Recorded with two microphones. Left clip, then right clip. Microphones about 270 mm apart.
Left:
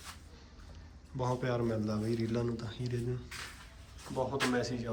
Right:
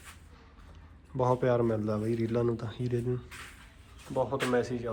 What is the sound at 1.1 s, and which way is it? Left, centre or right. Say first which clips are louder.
A man's voice: right 8 dB; centre.